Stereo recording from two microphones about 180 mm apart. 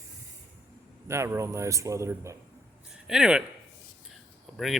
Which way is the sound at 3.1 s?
5° right (ahead or behind).